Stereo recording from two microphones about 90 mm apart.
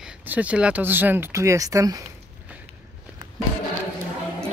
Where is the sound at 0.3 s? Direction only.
15° right (ahead or behind); by 2.0 s 40° right (ahead or behind).